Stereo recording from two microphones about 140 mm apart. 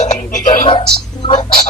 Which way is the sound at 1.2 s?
30° left (ahead or behind).